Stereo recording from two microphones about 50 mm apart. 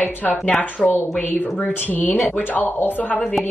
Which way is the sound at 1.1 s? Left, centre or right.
Left.